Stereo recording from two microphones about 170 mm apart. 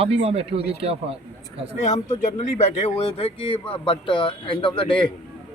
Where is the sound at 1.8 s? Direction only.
40° left (ahead or behind).